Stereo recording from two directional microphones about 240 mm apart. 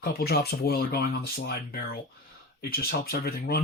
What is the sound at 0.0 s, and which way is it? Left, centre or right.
Speech, left.